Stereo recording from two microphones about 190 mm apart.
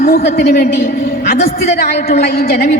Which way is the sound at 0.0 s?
55° left (ahead or behind).